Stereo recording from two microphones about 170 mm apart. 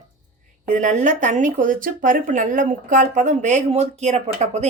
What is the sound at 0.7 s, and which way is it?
Speech, 45° right (ahead or behind).